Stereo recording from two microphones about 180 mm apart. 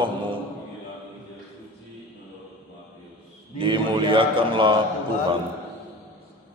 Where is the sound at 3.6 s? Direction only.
30° right (ahead or behind).